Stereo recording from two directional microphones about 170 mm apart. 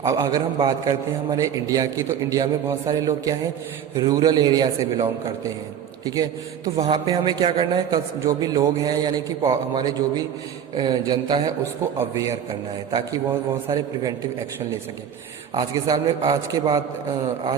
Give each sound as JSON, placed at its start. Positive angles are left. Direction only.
{"t": 0.0, "sound": "a man's voice", "side_deg": -20}
{"t": 6.7, "sound": "a man's voice", "side_deg": -35}
{"t": 13.7, "sound": "a man's voice", "side_deg": -20}
{"t": 15.5, "sound": "a man's voice", "side_deg": -25}